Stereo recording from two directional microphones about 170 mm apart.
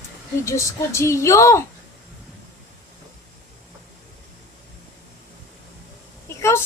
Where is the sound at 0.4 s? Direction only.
15° left (ahead or behind).